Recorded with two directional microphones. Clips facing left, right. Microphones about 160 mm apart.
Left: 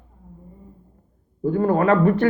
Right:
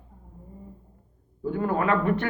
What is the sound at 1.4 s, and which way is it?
Speech, 40° left (ahead or behind).